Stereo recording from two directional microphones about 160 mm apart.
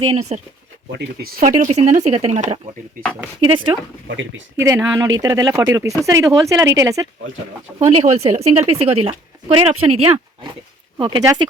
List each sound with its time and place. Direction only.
0.1 s speech: 45° right (ahead or behind)
1.0 s speech: 90° right
1.4 s speech: 55° right (ahead or behind)
3.4 s speech: 30° right (ahead or behind)
4.6 s speech: 20° right (ahead or behind)
7.8 s speech: 40° right (ahead or behind)
10.9 s speech: 25° right (ahead or behind)